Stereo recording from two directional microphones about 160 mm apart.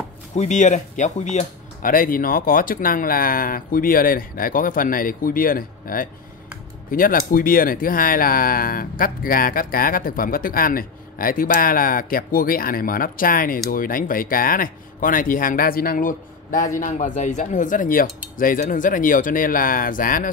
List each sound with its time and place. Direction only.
0.4 s speech: 50° left (ahead or behind)